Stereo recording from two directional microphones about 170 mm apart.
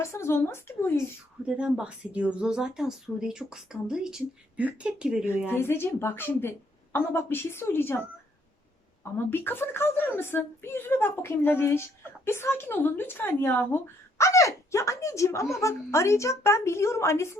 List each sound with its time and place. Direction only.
0.0 s speech: 15° left (ahead or behind)
1.5 s speech: 5° right (ahead or behind)
5.5 s speech: 15° left (ahead or behind)
9.1 s speech: 15° left (ahead or behind)